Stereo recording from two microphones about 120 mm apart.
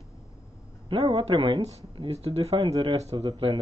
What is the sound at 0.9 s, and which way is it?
Speech, 50° right (ahead or behind).